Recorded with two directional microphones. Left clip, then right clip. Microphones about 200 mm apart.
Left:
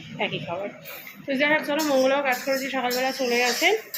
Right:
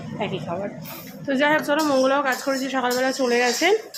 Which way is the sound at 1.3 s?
15° right (ahead or behind).